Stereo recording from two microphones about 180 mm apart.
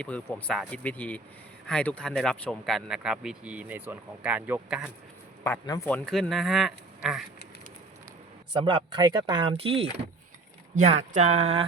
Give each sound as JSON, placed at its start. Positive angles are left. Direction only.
{"t": 0.0, "sound": "speech", "side_deg": 10}
{"t": 5.4, "sound": "speech", "side_deg": 20}
{"t": 5.9, "sound": "speech", "side_deg": 0}
{"t": 8.6, "sound": "speech", "side_deg": -25}